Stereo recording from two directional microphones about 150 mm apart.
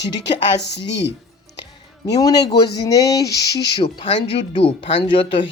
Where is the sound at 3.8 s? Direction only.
35° left (ahead or behind).